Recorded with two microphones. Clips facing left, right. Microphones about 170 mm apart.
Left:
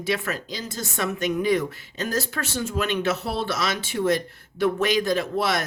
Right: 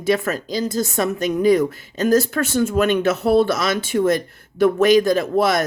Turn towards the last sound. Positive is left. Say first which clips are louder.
# right 6 dB
turn(degrees=-45)  # may be behind; listen again after turning